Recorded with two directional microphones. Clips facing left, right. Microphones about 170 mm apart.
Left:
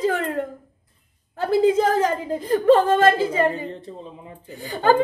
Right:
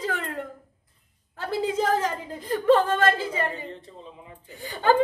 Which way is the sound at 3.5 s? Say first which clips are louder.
Left 6 dB; 35° left (ahead or behind).